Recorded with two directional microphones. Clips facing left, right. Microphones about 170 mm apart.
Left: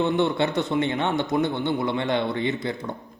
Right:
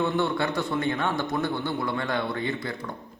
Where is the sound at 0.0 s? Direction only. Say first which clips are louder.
Left 3 dB; 20° left (ahead or behind).